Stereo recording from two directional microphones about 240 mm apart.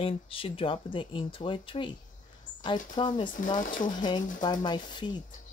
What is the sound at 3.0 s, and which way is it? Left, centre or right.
Speech, centre.